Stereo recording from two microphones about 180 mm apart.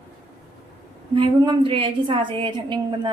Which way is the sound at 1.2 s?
25° right (ahead or behind).